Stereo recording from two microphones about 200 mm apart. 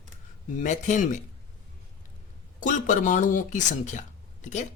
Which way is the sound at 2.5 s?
40° left (ahead or behind).